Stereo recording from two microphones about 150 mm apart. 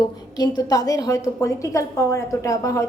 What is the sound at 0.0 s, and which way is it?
A woman's voice, 25° left (ahead or behind).